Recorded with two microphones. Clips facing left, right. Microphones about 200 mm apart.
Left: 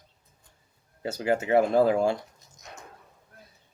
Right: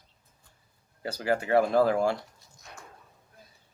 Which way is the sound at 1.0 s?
20° left (ahead or behind).